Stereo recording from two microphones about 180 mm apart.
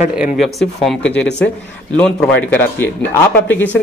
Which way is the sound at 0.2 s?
Centre (ahead or behind).